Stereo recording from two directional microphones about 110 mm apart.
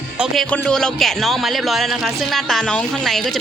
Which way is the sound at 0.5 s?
5° left (ahead or behind).